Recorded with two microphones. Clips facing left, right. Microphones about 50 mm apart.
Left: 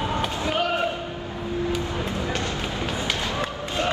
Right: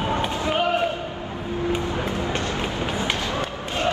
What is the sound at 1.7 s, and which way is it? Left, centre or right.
Run, right.